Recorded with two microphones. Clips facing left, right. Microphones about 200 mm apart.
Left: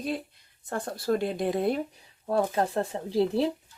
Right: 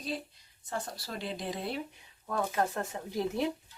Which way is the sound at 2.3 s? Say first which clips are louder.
Left 5 dB; 30° left (ahead or behind).